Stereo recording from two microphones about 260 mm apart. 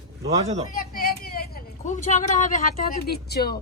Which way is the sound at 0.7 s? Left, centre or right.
Left.